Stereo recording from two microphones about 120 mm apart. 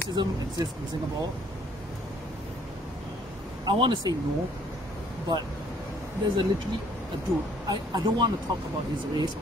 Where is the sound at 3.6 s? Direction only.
40° right (ahead or behind).